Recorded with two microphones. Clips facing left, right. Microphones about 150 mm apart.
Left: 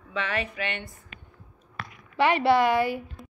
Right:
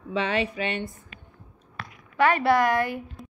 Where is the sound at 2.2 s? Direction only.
15° left (ahead or behind).